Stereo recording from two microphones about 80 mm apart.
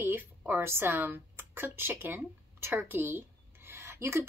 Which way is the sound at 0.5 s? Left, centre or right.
Right.